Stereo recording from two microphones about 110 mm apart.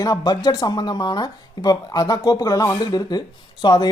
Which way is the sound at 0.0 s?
35° left (ahead or behind).